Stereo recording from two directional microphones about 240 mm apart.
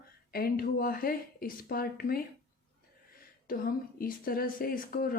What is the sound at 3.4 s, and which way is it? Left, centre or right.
Speech, left.